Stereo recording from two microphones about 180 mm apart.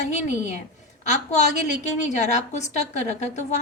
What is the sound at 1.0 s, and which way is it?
A woman's voice, 40° left (ahead or behind).